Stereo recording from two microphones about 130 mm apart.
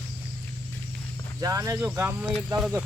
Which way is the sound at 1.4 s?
25° right (ahead or behind).